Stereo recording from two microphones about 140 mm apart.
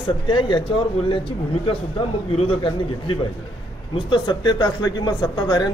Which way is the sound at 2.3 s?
40° left (ahead or behind).